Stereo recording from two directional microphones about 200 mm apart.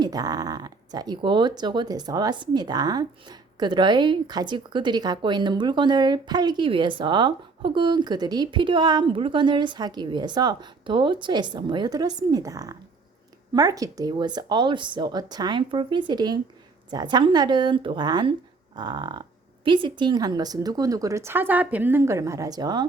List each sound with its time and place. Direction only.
0.0 s speech: 20° right (ahead or behind)